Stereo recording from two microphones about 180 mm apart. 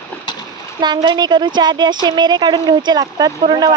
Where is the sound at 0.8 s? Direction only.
25° right (ahead or behind).